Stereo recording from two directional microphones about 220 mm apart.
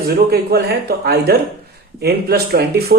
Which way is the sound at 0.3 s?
45° right (ahead or behind).